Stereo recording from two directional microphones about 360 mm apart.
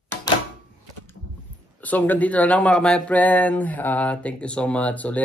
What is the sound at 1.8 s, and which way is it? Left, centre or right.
Speech, centre.